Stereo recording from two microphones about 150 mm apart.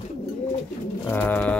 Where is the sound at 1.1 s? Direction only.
10° left (ahead or behind).